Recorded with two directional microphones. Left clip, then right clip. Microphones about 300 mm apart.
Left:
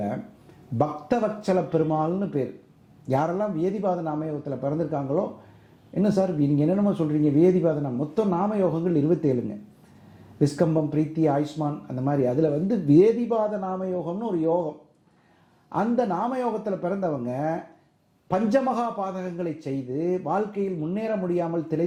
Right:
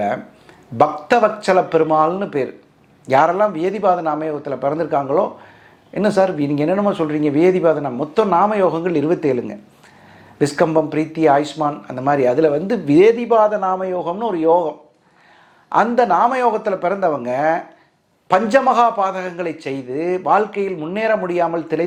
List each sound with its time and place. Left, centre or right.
0.8 s speech: centre
16.0 s speech: centre
18.8 s speech: centre